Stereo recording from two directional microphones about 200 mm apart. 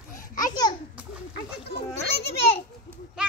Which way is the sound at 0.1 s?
40° left (ahead or behind).